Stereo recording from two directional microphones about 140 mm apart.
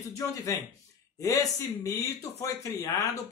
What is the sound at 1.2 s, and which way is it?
Speech, 25° left (ahead or behind).